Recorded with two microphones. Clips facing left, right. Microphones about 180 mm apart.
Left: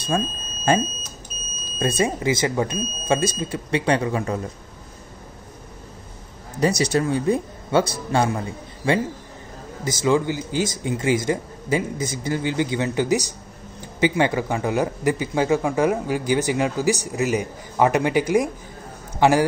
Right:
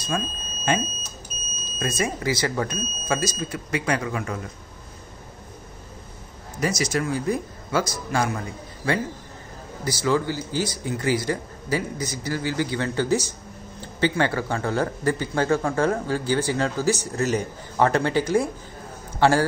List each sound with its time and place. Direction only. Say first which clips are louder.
0.1 s speech: left 4 dB; 25° left (ahead or behind)
1.8 s speech: left 4 dB; 30° left (ahead or behind)
6.8 s a man's voice: left 4 dB; 30° left (ahead or behind)